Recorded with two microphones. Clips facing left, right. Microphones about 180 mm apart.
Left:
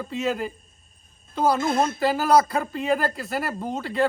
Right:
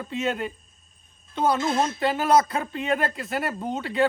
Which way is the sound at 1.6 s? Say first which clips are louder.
Left 1 dB; 55° left (ahead or behind).